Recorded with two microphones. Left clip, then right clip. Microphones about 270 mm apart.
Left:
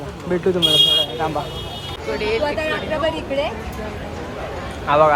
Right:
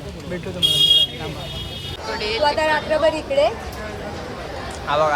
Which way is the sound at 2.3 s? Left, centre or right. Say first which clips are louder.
Right 5 dB; right.